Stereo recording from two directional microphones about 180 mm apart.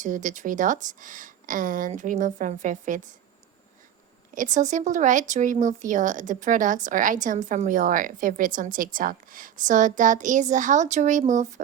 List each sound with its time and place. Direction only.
0.0 s speech: 45° right (ahead or behind)
4.4 s speech: 45° right (ahead or behind)